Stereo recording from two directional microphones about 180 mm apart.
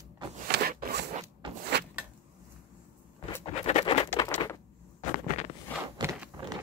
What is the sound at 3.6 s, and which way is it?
Patter, 35° left (ahead or behind).